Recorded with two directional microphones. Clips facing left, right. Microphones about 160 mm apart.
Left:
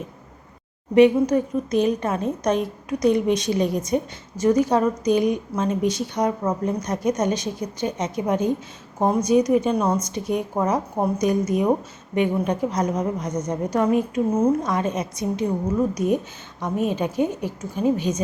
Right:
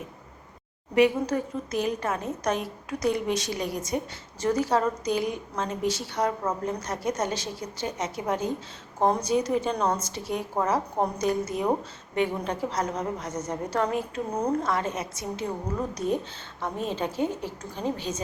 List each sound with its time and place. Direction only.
0.9 s a woman's voice: 20° left (ahead or behind)
10.2 s a woman's voice: 20° left (ahead or behind)
14.3 s a woman's voice: 5° left (ahead or behind)
14.6 s a woman's voice: 20° left (ahead or behind)